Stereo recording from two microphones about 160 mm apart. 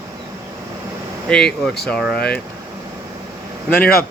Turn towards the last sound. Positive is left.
turn(degrees=70)  # may be behind; listen again after turning